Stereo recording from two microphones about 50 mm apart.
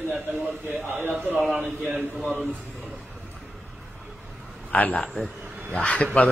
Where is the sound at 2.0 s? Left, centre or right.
Right.